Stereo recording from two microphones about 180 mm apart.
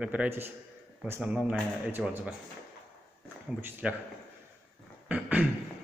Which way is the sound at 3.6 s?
10° right (ahead or behind).